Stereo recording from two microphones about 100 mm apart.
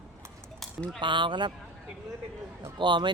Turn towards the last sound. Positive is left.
turn(degrees=-50)  # may be behind; listen again after turning